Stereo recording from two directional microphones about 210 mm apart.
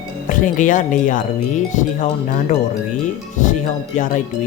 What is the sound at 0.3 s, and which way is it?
Speech, 40° left (ahead or behind).